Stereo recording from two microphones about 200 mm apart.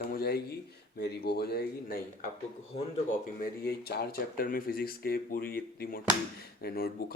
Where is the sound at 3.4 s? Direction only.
50° left (ahead or behind).